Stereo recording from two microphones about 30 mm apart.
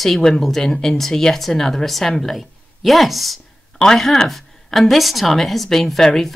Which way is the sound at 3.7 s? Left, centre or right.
Centre.